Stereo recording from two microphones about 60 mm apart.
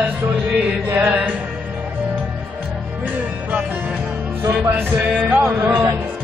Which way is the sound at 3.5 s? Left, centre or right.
Right.